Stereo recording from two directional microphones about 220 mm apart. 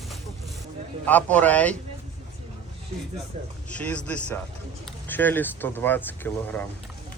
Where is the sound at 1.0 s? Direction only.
5° left (ahead or behind).